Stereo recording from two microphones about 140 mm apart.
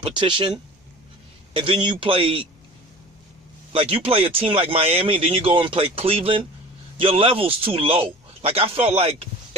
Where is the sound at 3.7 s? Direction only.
45° right (ahead or behind).